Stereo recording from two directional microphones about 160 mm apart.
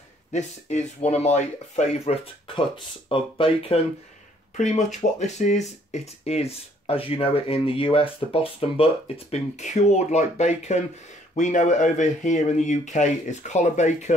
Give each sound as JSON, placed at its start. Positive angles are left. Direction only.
{"t": 0.3, "sound": "speech", "side_deg": 45}
{"t": 4.6, "sound": "speech", "side_deg": 45}